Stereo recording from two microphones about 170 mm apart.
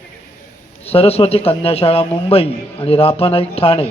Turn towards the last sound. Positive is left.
turn(degrees=35)  # may be behind; listen again after turning